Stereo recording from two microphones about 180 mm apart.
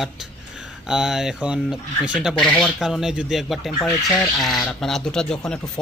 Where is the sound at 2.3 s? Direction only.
5° left (ahead or behind).